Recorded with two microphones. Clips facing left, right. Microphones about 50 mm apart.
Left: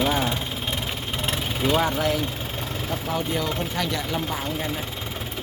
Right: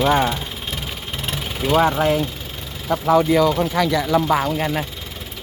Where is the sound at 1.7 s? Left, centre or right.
Right.